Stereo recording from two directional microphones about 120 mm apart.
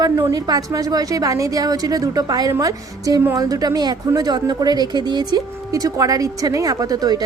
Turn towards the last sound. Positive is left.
turn(degrees=-30)  # may be behind; listen again after turning